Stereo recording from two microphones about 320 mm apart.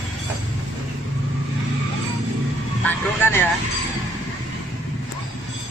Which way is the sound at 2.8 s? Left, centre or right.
Centre.